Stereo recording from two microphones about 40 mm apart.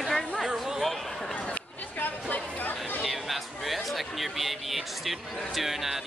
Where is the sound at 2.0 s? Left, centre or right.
Left.